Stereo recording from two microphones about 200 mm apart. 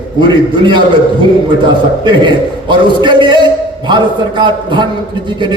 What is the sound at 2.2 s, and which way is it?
A man's voice, 25° right (ahead or behind).